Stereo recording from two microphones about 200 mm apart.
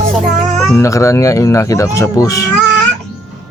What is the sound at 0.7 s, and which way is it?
Speech, 15° left (ahead or behind).